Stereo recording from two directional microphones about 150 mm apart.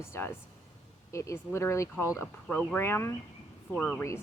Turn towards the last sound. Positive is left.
turn(degrees=10)  # may be behind; listen again after turning